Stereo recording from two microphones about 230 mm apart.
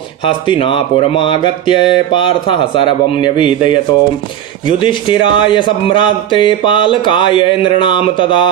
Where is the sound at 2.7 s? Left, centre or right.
Left.